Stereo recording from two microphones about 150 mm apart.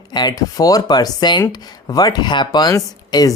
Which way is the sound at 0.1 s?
25° left (ahead or behind).